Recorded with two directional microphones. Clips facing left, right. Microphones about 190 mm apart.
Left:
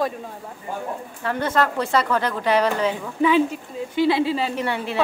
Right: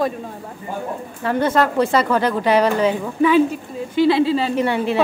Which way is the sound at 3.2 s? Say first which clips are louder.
Right 3 dB; 20° left (ahead or behind).